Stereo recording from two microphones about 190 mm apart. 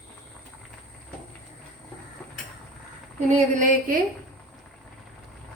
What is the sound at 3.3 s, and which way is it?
Speech, 40° right (ahead or behind).